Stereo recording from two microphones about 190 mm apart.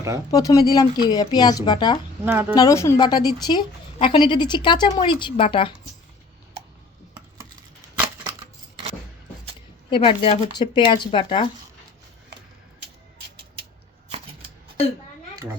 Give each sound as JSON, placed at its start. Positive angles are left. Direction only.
{"t": 0.3, "sound": "a woman's voice", "side_deg": 20}
{"t": 2.2, "sound": "speech", "side_deg": -10}
{"t": 2.6, "sound": "a woman's voice", "side_deg": 15}
{"t": 9.9, "sound": "a woman's voice", "side_deg": 30}